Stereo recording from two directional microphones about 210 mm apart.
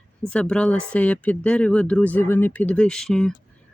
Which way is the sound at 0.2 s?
5° left (ahead or behind).